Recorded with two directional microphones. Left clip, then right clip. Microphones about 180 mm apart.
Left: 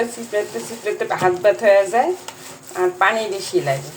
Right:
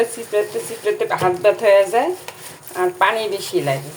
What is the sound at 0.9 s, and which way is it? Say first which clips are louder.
Speech: left 2 dB; 15° right (ahead or behind).